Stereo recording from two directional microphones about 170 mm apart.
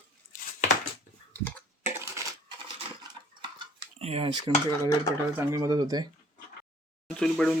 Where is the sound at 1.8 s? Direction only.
15° right (ahead or behind).